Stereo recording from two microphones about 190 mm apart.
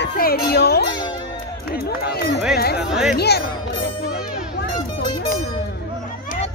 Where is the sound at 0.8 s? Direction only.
25° left (ahead or behind).